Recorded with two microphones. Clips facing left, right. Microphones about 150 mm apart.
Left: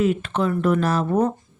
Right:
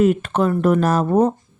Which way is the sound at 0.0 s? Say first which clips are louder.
Right 4 dB; 45° right (ahead or behind).